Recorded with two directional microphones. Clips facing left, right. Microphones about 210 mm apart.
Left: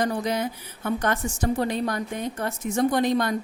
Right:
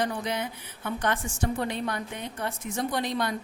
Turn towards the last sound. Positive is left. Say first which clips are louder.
# left 7 dB
turn(degrees=45)  # may be behind; listen again after turning